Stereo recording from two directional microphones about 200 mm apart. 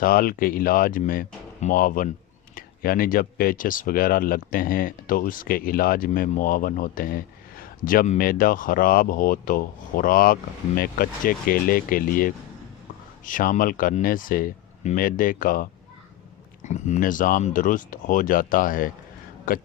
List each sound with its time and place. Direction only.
0.0 s speech: 45° left (ahead or behind)